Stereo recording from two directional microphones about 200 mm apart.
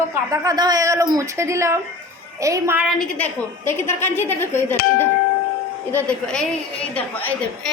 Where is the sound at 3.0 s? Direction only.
10° left (ahead or behind).